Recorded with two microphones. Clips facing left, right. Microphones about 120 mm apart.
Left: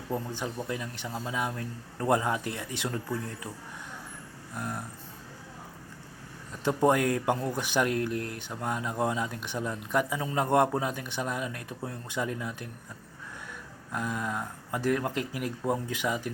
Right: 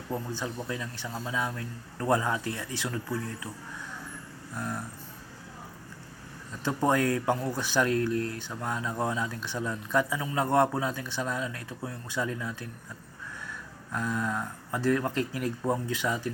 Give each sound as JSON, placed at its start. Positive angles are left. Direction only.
{"t": 0.3, "sound": "a man's voice", "side_deg": 20}
{"t": 4.5, "sound": "a man's voice", "side_deg": 20}
{"t": 6.7, "sound": "speech", "side_deg": 15}
{"t": 13.9, "sound": "speech", "side_deg": 10}